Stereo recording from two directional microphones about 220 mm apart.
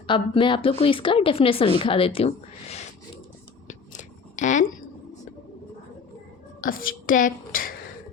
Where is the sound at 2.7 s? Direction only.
30° left (ahead or behind).